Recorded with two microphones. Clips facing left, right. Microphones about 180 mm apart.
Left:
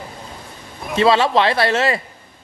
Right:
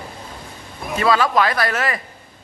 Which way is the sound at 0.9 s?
25° left (ahead or behind).